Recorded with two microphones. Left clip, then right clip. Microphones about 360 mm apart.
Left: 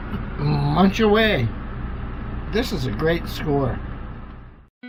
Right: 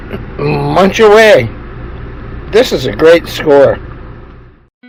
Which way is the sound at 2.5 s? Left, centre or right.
Centre.